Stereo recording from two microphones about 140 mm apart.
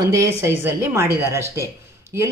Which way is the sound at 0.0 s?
20° right (ahead or behind).